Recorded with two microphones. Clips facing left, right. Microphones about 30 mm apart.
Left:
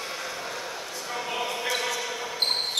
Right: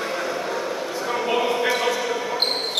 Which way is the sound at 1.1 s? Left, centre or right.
Right.